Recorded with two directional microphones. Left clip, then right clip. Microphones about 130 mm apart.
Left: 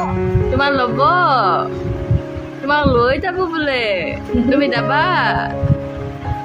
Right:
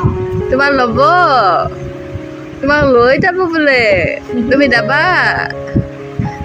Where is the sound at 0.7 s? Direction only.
40° right (ahead or behind).